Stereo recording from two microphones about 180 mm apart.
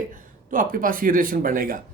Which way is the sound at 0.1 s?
50° right (ahead or behind).